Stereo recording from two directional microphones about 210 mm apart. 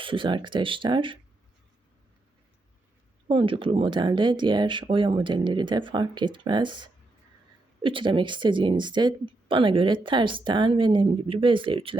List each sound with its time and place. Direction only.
0.0 s speech: 25° right (ahead or behind)
3.2 s speech: 25° right (ahead or behind)